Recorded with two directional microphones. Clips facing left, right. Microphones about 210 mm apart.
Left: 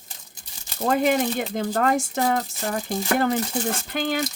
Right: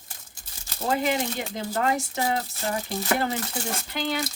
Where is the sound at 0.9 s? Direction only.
50° left (ahead or behind).